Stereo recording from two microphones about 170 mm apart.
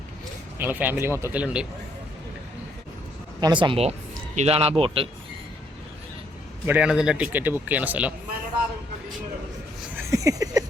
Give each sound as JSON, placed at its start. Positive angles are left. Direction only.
{"t": 0.6, "sound": "speech", "side_deg": -10}
{"t": 3.4, "sound": "speech", "side_deg": -30}
{"t": 6.7, "sound": "speech", "side_deg": -5}
{"t": 9.9, "sound": "a sound", "side_deg": -20}